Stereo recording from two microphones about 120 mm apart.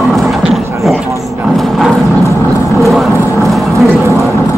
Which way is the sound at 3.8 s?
20° right (ahead or behind).